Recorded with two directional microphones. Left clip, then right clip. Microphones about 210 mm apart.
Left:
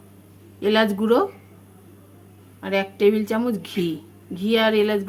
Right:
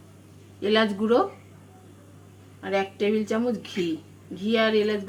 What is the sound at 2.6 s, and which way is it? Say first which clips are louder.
Speech: left 6 dB; 40° left (ahead or behind).